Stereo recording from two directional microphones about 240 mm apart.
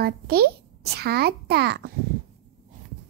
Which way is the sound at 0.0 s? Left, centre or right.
Right.